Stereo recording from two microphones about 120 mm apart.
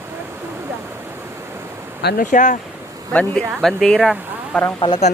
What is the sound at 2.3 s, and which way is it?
Speech, 90° left.